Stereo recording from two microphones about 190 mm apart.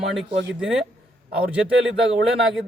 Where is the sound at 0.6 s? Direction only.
Centre (ahead or behind).